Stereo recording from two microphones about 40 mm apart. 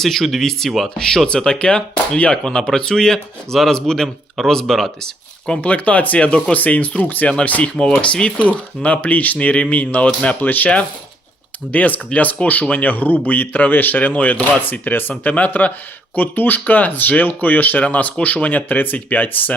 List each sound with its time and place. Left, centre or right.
0.0 s speech: centre
1.5 s speech: left; by 5.1 s centre
5.6 s speech: left
8.0 s speech: left
11.7 s speech: left
15.2 s speech: left
16.1 s speech: left